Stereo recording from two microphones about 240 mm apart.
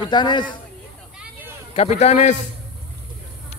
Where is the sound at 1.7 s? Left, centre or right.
Left.